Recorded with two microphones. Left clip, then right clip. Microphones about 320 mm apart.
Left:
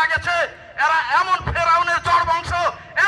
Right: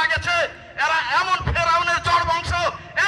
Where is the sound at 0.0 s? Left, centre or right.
Centre.